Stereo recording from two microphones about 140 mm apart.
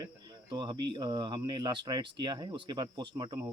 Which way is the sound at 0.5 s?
35° right (ahead or behind).